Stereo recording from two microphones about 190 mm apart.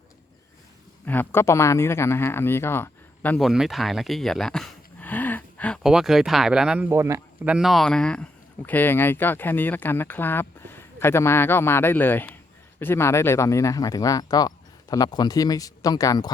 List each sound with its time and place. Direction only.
1.0 s a man's voice: 10° left (ahead or behind)